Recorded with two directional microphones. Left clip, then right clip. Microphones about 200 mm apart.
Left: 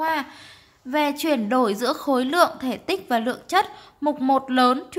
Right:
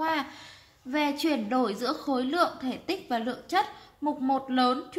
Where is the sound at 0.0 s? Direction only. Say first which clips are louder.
Left 5 dB; 20° left (ahead or behind).